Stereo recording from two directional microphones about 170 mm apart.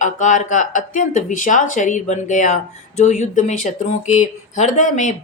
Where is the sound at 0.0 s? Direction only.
45° left (ahead or behind).